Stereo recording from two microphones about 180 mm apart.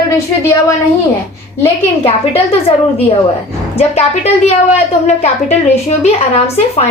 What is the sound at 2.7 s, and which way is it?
A woman's voice, 40° left (ahead or behind).